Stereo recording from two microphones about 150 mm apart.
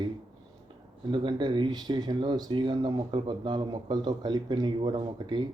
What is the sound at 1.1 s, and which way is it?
Speech, 30° right (ahead or behind).